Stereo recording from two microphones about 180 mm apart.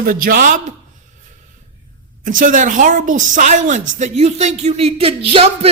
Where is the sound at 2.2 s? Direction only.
50° right (ahead or behind); by 5.7 s 30° right (ahead or behind).